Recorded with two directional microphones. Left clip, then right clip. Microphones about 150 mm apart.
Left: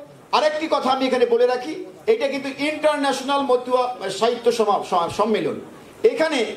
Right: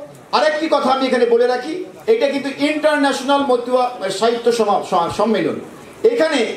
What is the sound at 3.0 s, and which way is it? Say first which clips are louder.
Speech: right 5 dB; 25° left (ahead or behind).